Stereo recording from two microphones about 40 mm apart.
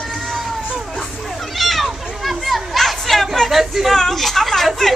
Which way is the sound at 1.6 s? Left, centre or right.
Centre.